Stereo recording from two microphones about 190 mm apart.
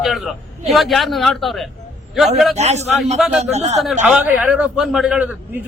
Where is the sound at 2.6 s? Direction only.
35° right (ahead or behind).